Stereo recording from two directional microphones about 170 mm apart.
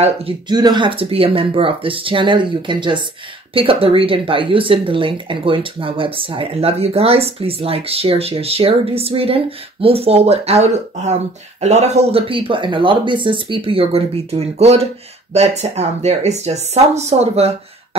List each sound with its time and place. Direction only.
0.0 s speech: 30° right (ahead or behind)